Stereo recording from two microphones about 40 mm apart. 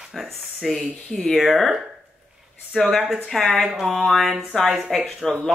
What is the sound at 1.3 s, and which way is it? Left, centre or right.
Speech, centre.